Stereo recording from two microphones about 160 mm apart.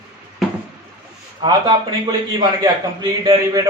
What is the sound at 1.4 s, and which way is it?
A man's voice, 25° right (ahead or behind).